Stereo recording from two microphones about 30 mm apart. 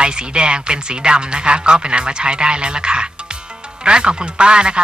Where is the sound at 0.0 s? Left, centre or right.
Right.